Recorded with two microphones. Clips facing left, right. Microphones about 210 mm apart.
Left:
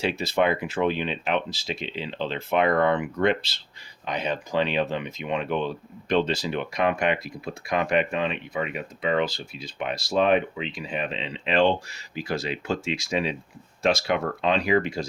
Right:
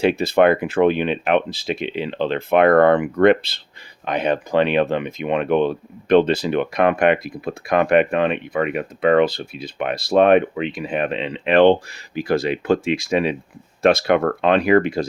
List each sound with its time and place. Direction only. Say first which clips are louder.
0.0 s speech: right 8 dB; 55° right (ahead or behind)